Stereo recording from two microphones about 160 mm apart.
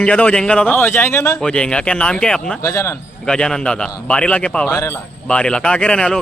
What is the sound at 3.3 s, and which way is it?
Speech, 5° left (ahead or behind).